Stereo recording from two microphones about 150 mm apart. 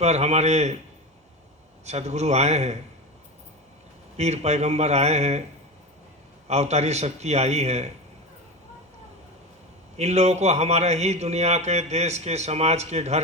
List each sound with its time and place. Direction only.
0.0 s a man's voice: 50° right (ahead or behind)
1.8 s a man's voice: 50° right (ahead or behind)
4.2 s a man's voice: 50° right (ahead or behind)
6.5 s a man's voice: 45° right (ahead or behind)
10.0 s a man's voice: 45° right (ahead or behind)